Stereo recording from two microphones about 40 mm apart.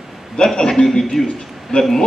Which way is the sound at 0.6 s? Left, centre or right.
Centre.